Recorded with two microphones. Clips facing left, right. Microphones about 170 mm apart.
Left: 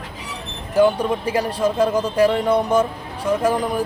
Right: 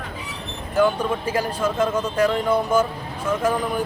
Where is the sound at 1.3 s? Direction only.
30° left (ahead or behind).